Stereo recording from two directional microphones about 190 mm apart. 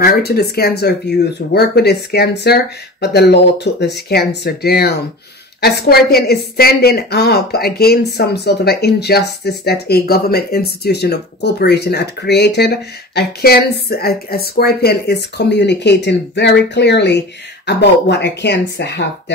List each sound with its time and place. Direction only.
0.0 s speech: 55° left (ahead or behind)